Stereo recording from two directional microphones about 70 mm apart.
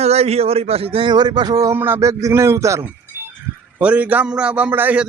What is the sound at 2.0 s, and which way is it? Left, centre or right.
Speech, right.